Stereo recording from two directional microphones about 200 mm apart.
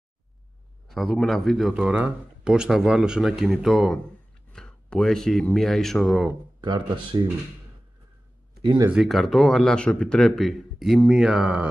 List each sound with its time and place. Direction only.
0.8 s speech: centre (ahead or behind)
6.6 s speech: 20° right (ahead or behind)
8.6 s speech: 20° right (ahead or behind)
8.9 s speech: centre (ahead or behind)